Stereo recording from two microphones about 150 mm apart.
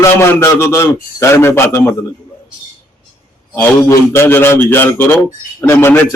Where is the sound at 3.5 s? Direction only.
15° left (ahead or behind).